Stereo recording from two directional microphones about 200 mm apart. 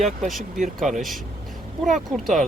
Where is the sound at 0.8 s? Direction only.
Centre (ahead or behind).